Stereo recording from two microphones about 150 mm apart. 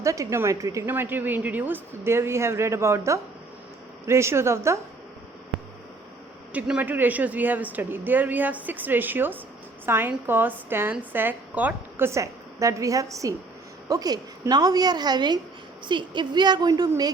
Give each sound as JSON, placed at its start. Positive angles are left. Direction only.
{"t": 0.0, "sound": "a woman's voice", "side_deg": -20}
{"t": 6.5, "sound": "a woman's voice", "side_deg": -10}